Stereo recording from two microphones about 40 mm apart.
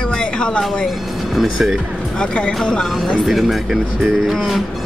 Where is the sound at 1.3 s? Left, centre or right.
Centre.